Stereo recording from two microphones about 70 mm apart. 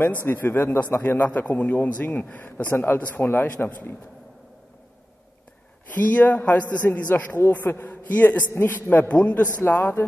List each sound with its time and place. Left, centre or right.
0.0 s a man's voice: left
3.0 s a man's voice: left
5.9 s a man's voice: left